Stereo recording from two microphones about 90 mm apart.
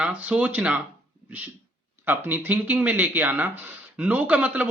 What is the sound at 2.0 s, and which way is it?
Speech, 20° right (ahead or behind).